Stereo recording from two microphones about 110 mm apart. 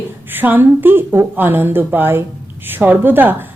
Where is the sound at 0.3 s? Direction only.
15° right (ahead or behind).